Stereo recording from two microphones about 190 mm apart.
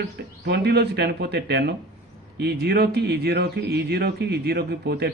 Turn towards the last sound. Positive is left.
turn(degrees=-55)  # may be behind; listen again after turning